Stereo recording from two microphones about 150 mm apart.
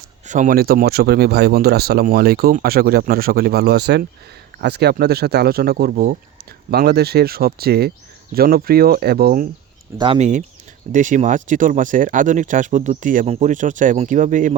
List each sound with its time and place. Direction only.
0.3 s speech: 60° right (ahead or behind); by 9.5 s 80° right
10.2 s speech: 55° right (ahead or behind)